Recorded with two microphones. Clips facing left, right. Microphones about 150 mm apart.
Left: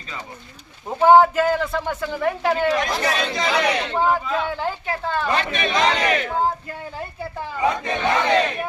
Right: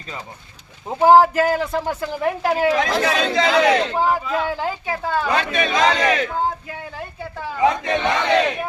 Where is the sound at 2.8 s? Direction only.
90° right.